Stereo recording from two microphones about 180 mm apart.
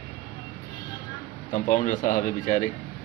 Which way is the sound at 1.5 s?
45° left (ahead or behind).